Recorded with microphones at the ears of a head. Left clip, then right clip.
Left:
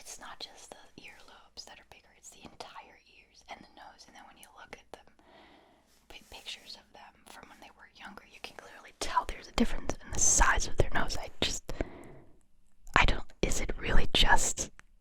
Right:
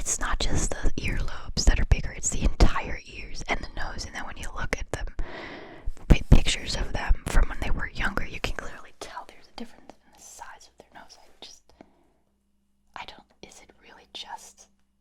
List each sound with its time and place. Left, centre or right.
0.0 s whispering: right
9.1 s whispering: left
12.9 s whispering: left